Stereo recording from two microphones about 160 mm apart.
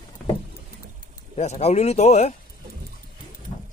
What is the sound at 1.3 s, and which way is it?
Speech, 45° left (ahead or behind).